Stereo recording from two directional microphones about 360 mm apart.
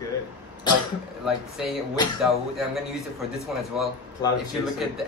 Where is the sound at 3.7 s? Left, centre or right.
Centre.